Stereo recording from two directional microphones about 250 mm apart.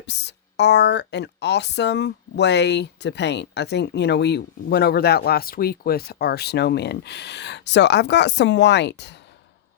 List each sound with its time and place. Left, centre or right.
0.0 s speech: left